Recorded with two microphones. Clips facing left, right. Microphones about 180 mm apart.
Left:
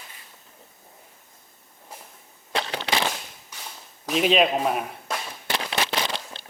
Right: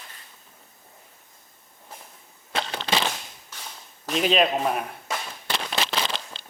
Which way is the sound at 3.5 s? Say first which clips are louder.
Even; 10° left (ahead or behind).